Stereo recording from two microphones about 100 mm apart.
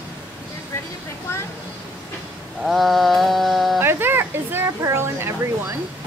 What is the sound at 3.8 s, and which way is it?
Speech, 20° right (ahead or behind).